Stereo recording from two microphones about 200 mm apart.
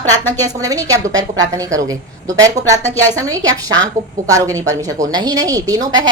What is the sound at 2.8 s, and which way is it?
Speech, 10° left (ahead or behind).